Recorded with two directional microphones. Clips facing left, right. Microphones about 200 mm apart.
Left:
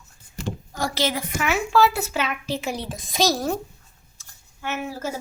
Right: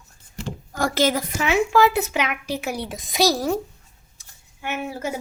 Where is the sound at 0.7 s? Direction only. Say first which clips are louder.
Right 5 dB; 50° right (ahead or behind).